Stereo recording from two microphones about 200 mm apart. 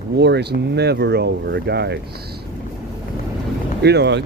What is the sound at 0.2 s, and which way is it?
Speech, 55° right (ahead or behind).